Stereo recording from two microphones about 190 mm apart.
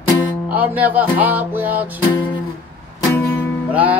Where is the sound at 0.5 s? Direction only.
10° right (ahead or behind).